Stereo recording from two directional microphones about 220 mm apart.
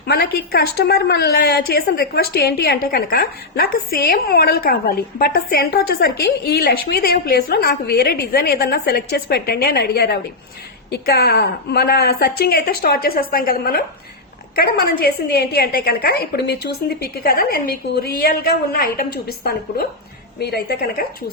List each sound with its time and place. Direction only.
0.0 s a woman's voice: 45° left (ahead or behind)